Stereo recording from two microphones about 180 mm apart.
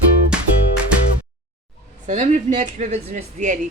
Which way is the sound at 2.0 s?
40° right (ahead or behind).